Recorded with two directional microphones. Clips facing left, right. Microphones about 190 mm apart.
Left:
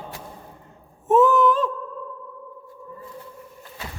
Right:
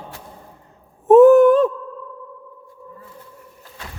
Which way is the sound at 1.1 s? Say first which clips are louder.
Right 9 dB; 60° right (ahead or behind).